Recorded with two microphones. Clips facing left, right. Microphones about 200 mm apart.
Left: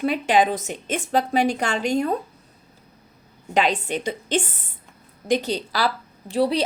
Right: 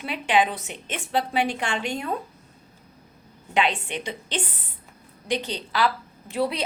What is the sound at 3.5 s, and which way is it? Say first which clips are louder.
A woman's voice: left 3 dB; 40° left (ahead or behind).